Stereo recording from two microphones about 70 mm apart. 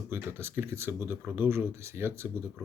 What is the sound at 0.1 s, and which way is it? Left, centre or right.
Speech, right.